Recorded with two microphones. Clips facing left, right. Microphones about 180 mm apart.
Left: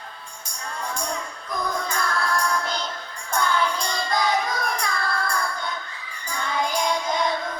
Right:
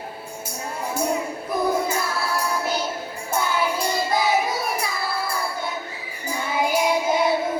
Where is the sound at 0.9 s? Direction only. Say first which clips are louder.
Right 7 dB; 5° right (ahead or behind).